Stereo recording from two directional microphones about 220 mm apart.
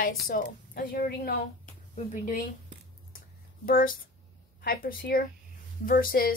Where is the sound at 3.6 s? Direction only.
40° left (ahead or behind).